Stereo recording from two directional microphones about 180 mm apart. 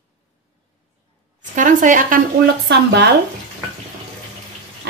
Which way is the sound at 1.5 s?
45° right (ahead or behind).